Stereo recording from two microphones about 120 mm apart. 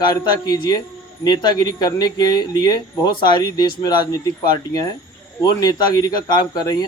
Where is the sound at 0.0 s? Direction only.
35° left (ahead or behind).